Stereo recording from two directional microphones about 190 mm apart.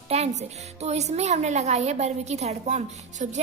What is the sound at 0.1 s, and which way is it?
Speech, 35° right (ahead or behind).